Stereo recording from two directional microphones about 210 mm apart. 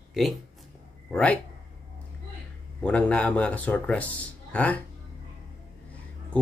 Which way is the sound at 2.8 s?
5° left (ahead or behind).